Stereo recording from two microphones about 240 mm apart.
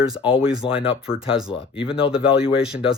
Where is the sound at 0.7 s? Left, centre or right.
Left.